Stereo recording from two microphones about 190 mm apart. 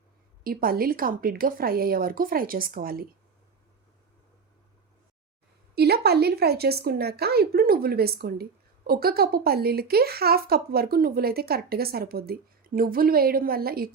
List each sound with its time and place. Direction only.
0.4 s speech: 50° right (ahead or behind)
5.7 s speech: 55° right (ahead or behind)